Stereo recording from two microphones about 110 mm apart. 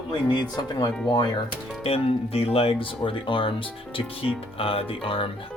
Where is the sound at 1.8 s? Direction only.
65° left (ahead or behind).